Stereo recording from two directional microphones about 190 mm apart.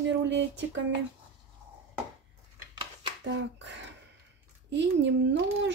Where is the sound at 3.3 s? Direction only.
70° right (ahead or behind).